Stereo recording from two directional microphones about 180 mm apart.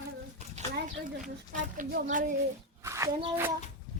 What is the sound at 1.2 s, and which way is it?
Speech, 45° right (ahead or behind).